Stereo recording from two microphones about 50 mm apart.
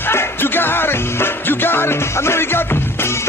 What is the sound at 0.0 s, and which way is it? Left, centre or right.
Music, left.